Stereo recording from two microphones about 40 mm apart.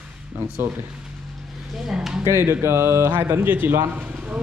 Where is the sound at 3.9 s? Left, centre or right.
Right.